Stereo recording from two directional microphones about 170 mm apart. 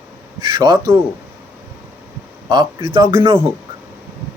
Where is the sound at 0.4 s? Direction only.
25° right (ahead or behind).